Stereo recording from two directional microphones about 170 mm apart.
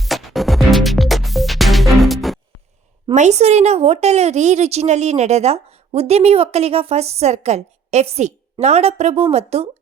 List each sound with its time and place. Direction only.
0.0 s music: centre (ahead or behind)
3.2 s a woman's voice: 40° right (ahead or behind)